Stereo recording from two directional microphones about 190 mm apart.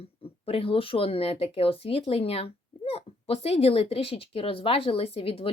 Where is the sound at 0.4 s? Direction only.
30° left (ahead or behind).